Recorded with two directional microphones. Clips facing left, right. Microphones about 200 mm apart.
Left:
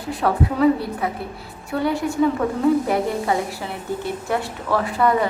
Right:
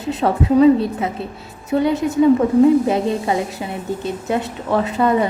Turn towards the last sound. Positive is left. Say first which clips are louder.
# right 3 dB
turn(degrees=-20)  # may be behind; listen again after turning